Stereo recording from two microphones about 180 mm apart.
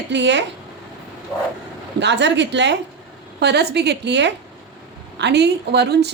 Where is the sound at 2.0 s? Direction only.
80° right.